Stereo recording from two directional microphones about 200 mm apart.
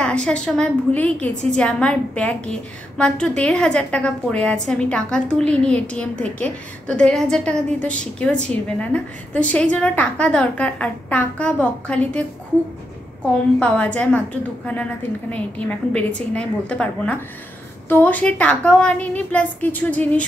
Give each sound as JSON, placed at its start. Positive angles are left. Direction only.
{"t": 0.0, "sound": "a woman's voice", "side_deg": 5}